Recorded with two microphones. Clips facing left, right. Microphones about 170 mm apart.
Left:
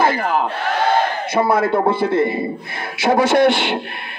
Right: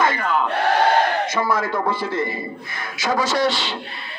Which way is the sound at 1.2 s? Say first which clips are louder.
Left 5 dB; 30° left (ahead or behind).